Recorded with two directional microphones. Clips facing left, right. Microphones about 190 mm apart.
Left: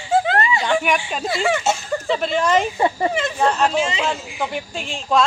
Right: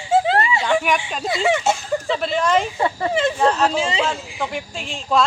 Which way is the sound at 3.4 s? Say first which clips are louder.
Left 3 dB; centre (ahead or behind).